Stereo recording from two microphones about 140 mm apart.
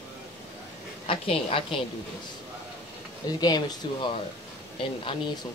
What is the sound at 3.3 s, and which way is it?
Speech, 30° left (ahead or behind).